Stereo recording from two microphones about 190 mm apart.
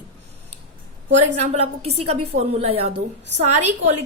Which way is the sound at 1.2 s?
35° right (ahead or behind).